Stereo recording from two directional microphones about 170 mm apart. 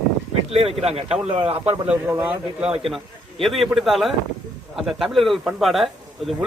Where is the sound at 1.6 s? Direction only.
10° right (ahead or behind).